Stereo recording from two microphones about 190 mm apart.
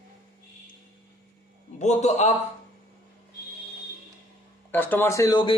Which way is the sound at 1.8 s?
40° left (ahead or behind).